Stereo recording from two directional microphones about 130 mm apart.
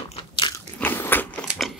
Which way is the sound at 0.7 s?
15° left (ahead or behind).